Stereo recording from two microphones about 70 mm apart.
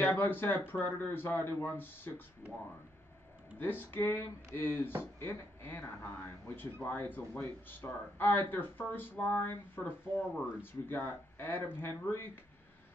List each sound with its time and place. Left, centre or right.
0.0 s speech: left
3.5 s speech: left